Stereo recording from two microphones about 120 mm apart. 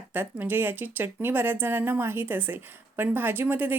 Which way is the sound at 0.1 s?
15° right (ahead or behind).